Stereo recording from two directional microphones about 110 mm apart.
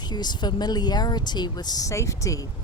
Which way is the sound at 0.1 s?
40° left (ahead or behind).